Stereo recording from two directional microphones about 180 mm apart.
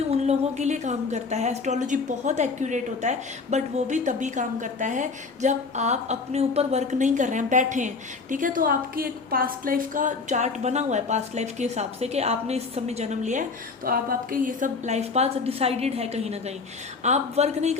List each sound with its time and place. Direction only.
0.1 s a woman's voice: 40° right (ahead or behind)
13.8 s a woman's voice: 55° right (ahead or behind); by 17.7 s 40° right (ahead or behind)